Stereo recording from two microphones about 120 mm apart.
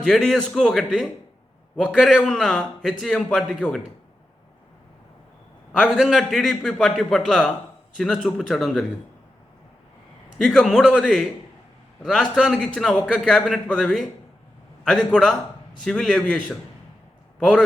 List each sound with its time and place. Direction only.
0.0 s a man's voice: 5° left (ahead or behind)
5.8 s a man's voice: centre (ahead or behind)
10.3 s a man's voice: 5° left (ahead or behind)
12.5 s a man's voice: 10° left (ahead or behind)
15.1 s a man's voice: 5° left (ahead or behind)